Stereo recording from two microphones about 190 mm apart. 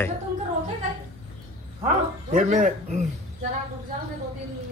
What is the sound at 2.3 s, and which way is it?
Speech, 40° right (ahead or behind).